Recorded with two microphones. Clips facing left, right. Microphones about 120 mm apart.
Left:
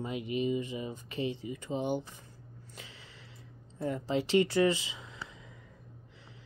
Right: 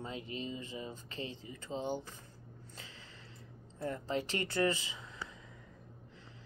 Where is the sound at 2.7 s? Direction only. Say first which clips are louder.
Left 3 dB; 15° left (ahead or behind).